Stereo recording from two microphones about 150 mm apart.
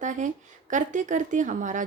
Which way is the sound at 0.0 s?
55° right (ahead or behind).